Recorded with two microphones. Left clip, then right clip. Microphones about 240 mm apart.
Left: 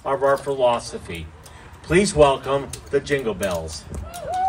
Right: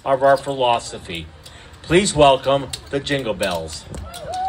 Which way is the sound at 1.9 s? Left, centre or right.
Centre.